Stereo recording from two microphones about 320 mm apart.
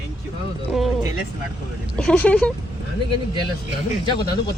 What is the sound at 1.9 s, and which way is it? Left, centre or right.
Speech, centre.